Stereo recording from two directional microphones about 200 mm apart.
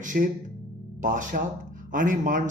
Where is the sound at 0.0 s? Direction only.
40° right (ahead or behind).